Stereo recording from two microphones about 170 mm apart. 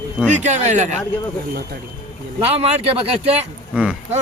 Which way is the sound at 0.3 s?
45° right (ahead or behind).